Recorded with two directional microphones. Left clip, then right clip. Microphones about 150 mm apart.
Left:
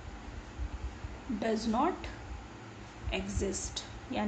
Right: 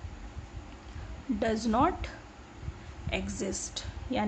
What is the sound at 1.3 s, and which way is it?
Speech, 45° right (ahead or behind).